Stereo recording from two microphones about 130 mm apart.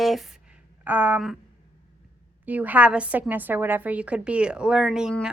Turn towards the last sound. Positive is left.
turn(degrees=-5)  # may be behind; listen again after turning